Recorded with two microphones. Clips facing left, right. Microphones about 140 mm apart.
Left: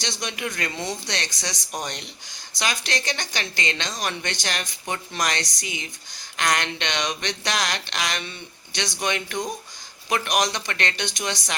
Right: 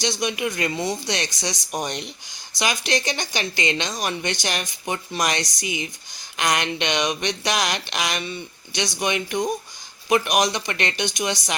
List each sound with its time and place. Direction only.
0.0 s speech: 10° right (ahead or behind)